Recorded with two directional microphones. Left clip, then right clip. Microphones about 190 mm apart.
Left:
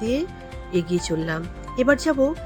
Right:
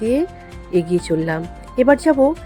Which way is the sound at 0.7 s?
5° right (ahead or behind).